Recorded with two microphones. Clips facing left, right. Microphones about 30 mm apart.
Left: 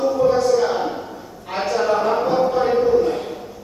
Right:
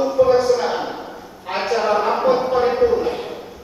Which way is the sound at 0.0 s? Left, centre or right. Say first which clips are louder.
Right 2 dB; right.